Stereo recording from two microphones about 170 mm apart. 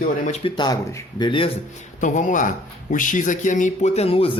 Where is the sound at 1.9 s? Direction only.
50° left (ahead or behind).